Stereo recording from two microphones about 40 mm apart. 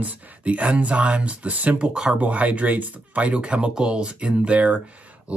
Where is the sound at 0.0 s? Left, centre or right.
Right.